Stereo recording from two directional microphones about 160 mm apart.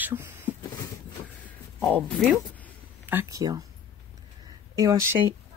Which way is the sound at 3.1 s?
15° right (ahead or behind).